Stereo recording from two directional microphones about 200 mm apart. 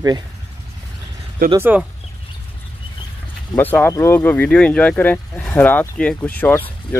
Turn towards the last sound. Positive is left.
turn(degrees=10)  # may be behind; listen again after turning